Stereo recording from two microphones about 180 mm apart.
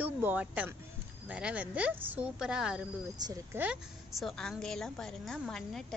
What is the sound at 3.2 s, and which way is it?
Speech, 20° right (ahead or behind).